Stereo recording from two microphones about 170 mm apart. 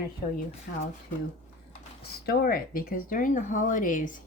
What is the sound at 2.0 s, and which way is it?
Speech, 65° left (ahead or behind).